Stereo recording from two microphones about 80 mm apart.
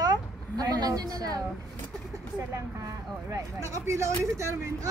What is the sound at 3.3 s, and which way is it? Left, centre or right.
Speech, right.